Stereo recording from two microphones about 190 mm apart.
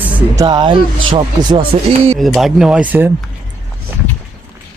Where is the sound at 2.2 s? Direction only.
Centre (ahead or behind).